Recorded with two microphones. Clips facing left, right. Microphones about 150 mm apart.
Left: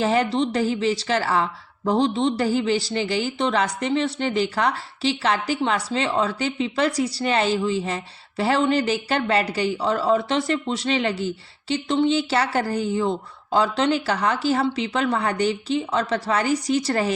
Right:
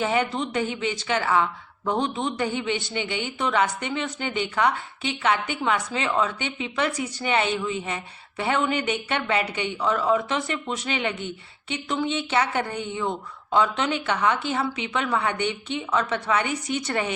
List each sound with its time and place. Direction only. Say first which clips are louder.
0.1 s a woman's voice: left 4 dB; 35° left (ahead or behind)